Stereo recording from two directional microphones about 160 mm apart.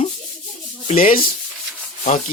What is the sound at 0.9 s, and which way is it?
Speech, 60° left (ahead or behind).